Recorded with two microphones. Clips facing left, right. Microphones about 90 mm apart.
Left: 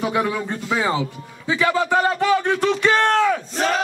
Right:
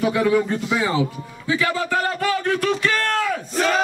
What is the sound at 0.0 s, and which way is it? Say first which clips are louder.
Speech: right 4 dB; 20° left (ahead or behind).